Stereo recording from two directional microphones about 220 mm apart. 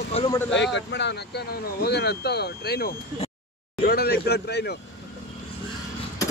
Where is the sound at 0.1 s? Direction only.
30° left (ahead or behind).